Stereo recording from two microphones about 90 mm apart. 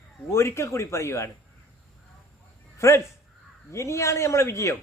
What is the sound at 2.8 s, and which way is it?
A man's voice, 35° left (ahead or behind).